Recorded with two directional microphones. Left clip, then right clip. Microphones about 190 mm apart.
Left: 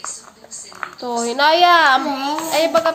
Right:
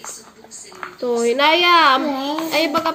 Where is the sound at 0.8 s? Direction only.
5° left (ahead or behind).